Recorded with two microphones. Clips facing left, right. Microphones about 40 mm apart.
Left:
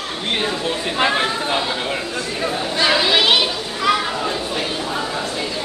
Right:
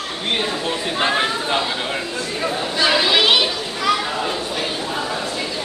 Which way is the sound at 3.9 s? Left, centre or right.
Centre.